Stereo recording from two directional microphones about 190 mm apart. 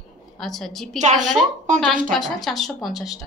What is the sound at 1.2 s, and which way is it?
Speech, 40° right (ahead or behind).